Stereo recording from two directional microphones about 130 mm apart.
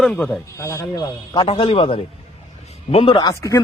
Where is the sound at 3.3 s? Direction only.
25° left (ahead or behind).